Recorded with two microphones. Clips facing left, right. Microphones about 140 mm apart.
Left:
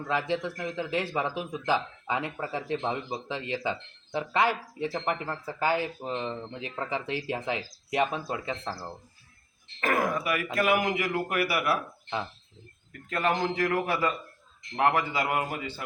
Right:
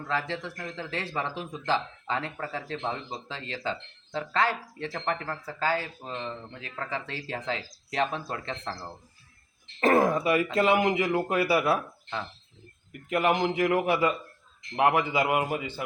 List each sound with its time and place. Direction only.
0.1 s a man's voice: 15° left (ahead or behind)
9.8 s speech: 30° right (ahead or behind)
12.9 s a man's voice: 20° right (ahead or behind)